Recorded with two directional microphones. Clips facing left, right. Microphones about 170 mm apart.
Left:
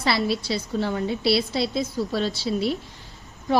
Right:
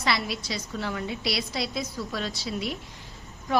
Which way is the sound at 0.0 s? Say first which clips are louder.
Left 5 dB; 30° left (ahead or behind).